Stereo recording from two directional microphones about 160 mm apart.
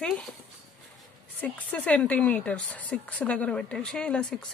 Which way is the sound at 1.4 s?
5° left (ahead or behind).